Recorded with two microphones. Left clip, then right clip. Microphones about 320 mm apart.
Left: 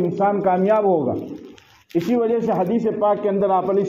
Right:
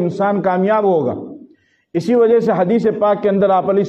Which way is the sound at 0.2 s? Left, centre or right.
Right.